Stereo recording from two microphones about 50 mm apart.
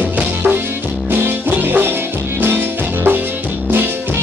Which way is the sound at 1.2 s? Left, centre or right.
Right.